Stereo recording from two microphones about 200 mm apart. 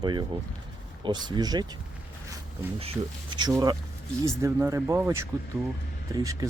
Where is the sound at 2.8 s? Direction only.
25° right (ahead or behind).